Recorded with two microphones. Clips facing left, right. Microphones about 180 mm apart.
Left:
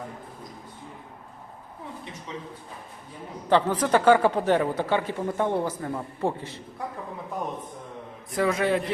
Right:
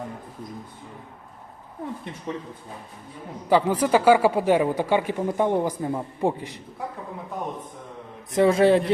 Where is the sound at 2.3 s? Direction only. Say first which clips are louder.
Right 6 dB; 55° right (ahead or behind).